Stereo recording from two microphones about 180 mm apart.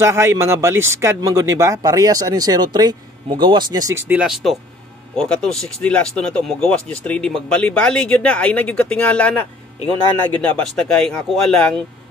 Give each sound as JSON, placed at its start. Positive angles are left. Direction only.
{"t": 0.0, "sound": "speech", "side_deg": -15}
{"t": 4.1, "sound": "speech", "side_deg": -5}
{"t": 10.7, "sound": "speech", "side_deg": 5}